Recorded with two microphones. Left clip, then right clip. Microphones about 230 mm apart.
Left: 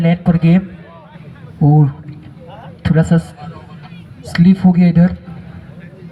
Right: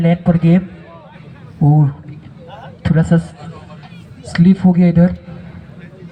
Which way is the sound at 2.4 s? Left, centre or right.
Right.